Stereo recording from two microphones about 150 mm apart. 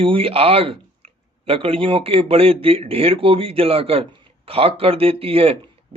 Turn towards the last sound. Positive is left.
turn(degrees=-40)  # may be behind; listen again after turning